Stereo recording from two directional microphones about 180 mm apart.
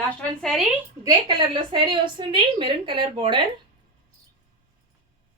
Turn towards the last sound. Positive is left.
turn(degrees=-25)  # may be behind; listen again after turning